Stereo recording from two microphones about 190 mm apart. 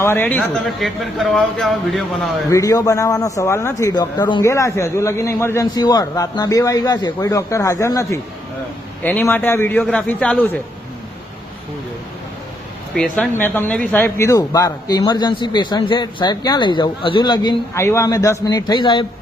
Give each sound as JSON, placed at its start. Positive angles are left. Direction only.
{"t": 0.0, "sound": "speech", "side_deg": 10}
{"t": 2.5, "sound": "a man's voice", "side_deg": 15}
{"t": 12.9, "sound": "speech", "side_deg": 5}